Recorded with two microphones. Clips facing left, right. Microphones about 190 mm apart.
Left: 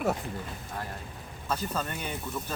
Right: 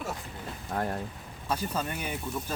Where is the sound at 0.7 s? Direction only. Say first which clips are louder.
Right 8 dB; 50° right (ahead or behind).